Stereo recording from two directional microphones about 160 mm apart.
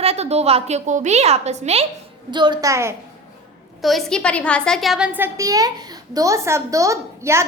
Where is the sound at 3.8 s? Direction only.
5° left (ahead or behind).